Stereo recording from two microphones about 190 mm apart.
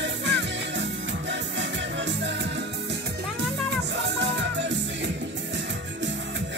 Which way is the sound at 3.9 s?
70° right (ahead or behind).